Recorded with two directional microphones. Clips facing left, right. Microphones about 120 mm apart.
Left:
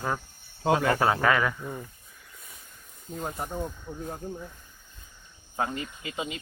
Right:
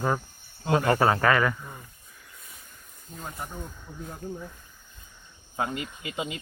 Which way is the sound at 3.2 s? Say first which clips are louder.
Left 5 dB; 30° left (ahead or behind).